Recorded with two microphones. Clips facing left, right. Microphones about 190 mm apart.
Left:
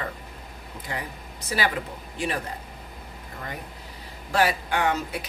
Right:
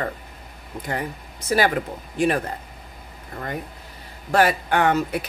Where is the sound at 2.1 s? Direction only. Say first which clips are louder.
Right 8 dB; 50° right (ahead or behind).